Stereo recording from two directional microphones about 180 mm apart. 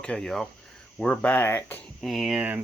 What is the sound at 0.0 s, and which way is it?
Speech, 5° left (ahead or behind).